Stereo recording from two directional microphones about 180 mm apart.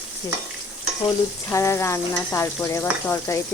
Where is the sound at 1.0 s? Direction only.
15° left (ahead or behind).